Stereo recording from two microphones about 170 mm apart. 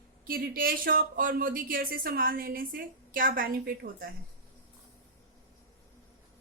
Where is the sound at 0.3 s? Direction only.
60° right (ahead or behind).